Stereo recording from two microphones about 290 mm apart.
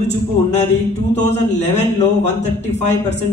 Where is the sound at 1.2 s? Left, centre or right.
Left.